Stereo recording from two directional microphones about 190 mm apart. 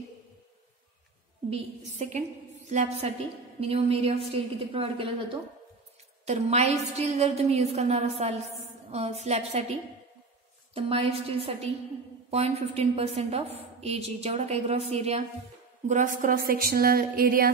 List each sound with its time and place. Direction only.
1.5 s a woman's voice: 35° right (ahead or behind)
6.2 s a woman's voice: 35° right (ahead or behind)